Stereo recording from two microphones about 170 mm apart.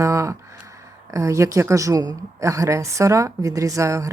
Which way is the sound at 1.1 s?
20° right (ahead or behind).